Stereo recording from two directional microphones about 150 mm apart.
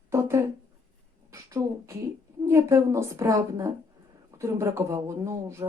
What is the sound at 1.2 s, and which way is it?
Speech, 20° right (ahead or behind).